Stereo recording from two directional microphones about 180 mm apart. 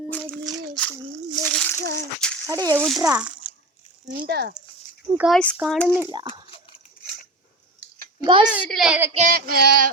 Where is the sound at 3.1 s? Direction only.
5° right (ahead or behind).